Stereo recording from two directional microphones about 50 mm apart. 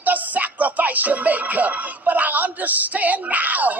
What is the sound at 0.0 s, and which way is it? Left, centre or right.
Music, right.